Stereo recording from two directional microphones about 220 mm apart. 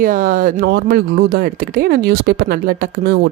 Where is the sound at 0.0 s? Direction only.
40° right (ahead or behind).